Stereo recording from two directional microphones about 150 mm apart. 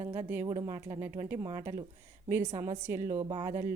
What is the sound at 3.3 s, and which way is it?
Speech, 25° right (ahead or behind).